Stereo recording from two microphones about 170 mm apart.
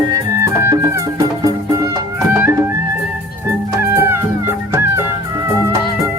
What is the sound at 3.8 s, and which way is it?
Music, 15° right (ahead or behind).